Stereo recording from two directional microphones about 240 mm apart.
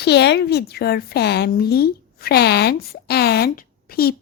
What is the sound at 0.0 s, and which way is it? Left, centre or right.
Speech, left.